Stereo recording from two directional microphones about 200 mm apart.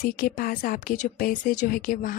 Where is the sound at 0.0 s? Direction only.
45° left (ahead or behind).